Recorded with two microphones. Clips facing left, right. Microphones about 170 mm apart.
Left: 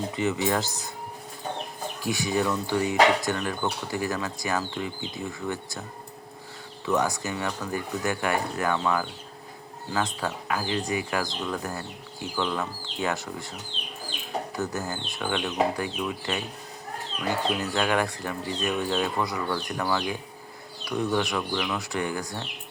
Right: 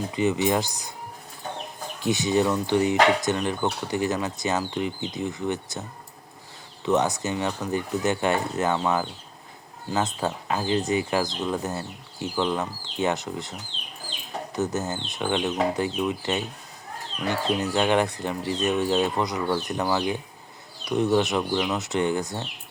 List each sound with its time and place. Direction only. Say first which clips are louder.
0.1 s speech: right 4 dB; 20° right (ahead or behind)
2.0 s speech: right 4 dB; 20° right (ahead or behind)
6.8 s speech: right 3 dB; 20° right (ahead or behind)
14.5 s speech: right 7 dB; 20° right (ahead or behind)
17.7 s speech: right 5 dB; 20° right (ahead or behind)